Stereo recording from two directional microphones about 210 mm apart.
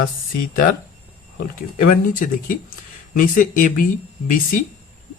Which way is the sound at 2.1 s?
40° left (ahead or behind).